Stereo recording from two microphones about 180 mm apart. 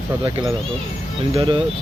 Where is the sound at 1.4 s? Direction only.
30° right (ahead or behind).